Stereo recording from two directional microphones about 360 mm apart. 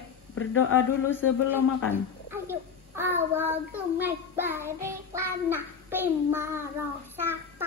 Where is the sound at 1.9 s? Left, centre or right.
Centre.